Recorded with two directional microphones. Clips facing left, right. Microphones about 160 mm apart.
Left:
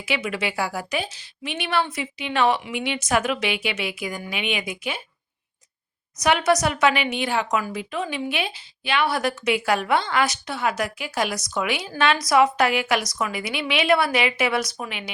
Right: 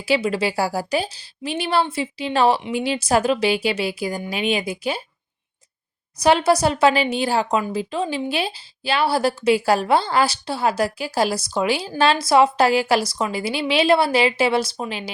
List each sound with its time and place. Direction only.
0.0 s speech: 35° right (ahead or behind)
6.1 s speech: 30° right (ahead or behind)